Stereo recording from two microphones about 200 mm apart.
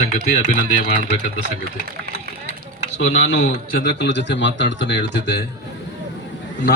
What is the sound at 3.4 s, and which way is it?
Speech, 50° left (ahead or behind).